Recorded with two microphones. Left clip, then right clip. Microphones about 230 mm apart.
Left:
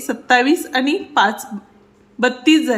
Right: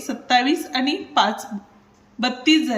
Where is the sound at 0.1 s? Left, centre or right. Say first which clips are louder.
Left 4 dB; centre.